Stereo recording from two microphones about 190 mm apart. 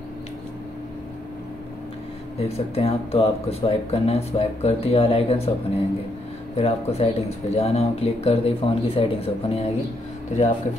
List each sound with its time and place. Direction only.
2.3 s speech: 30° left (ahead or behind)